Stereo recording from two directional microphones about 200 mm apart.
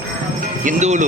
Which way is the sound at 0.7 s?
35° right (ahead or behind).